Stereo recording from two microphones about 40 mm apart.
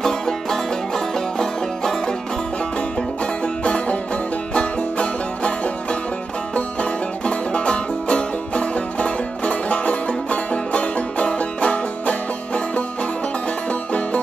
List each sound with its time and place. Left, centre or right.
0.0 s music: centre
3.6 s music: left